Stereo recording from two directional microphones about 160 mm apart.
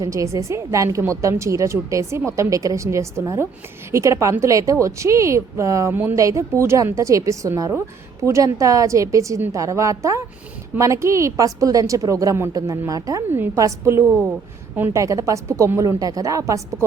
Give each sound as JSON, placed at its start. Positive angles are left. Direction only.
{"t": 0.0, "sound": "a woman's voice", "side_deg": -20}